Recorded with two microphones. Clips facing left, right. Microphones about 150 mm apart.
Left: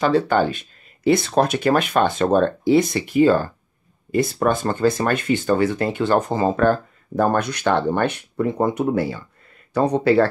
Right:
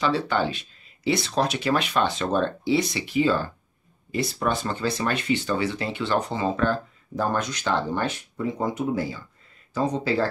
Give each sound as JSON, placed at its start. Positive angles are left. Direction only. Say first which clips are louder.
{"t": 0.0, "sound": "speech", "louder": "left 6 dB", "side_deg": 50}